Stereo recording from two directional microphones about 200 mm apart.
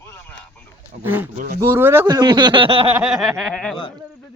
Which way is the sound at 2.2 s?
20° right (ahead or behind).